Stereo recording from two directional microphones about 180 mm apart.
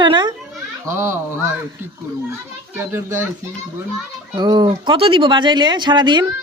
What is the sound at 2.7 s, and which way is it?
Speech, 15° right (ahead or behind).